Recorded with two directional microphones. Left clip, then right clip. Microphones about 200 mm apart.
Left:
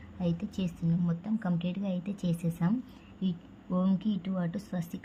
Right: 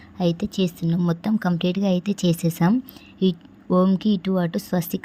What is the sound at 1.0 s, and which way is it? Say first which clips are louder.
A woman's voice: right 11 dB; 45° right (ahead or behind).